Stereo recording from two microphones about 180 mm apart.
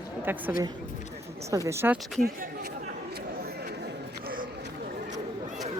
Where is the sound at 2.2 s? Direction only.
60° right (ahead or behind).